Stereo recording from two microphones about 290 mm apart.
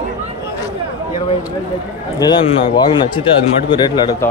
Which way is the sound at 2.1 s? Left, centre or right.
Centre.